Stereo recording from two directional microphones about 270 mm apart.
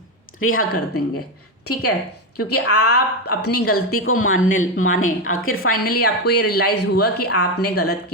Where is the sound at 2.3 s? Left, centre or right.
Left.